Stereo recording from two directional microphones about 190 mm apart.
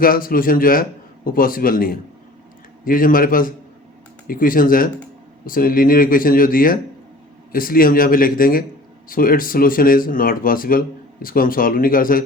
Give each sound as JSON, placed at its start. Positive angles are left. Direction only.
{"t": 0.0, "sound": "speech", "side_deg": 50}